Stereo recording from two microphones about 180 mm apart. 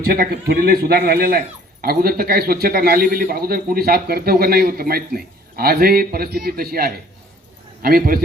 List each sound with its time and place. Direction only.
0.1 s a man's voice: 60° right (ahead or behind)